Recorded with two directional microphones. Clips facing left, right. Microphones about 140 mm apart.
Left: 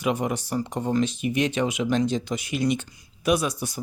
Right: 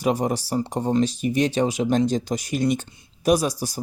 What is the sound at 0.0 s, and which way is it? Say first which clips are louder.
Speech: right 3 dB; 35° right (ahead or behind).